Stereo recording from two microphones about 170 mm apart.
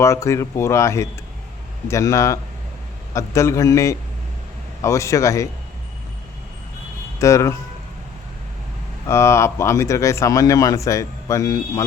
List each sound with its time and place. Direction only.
0.0 s speech: 15° left (ahead or behind)
7.2 s speech: 20° left (ahead or behind)
9.0 s speech: 15° left (ahead or behind)